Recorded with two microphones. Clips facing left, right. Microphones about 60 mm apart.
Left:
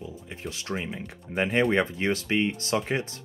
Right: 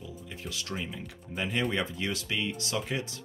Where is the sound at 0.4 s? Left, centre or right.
Left.